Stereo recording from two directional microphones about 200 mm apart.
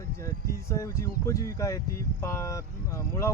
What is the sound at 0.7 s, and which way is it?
Speech, 15° left (ahead or behind).